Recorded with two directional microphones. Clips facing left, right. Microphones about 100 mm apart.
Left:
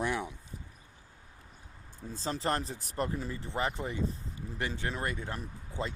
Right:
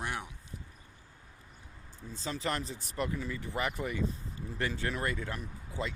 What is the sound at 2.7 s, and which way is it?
Speech, 50° left (ahead or behind).